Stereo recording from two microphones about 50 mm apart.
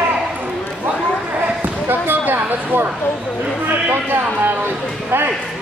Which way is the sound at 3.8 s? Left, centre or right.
Right.